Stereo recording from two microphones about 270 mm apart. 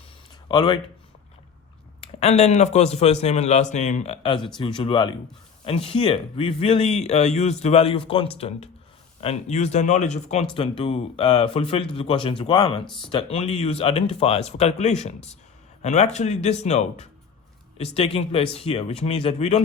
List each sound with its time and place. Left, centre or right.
0.4 s speech: centre
2.1 s speech: left